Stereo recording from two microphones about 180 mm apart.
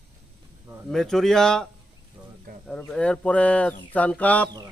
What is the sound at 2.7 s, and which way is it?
A man's voice, 5° left (ahead or behind).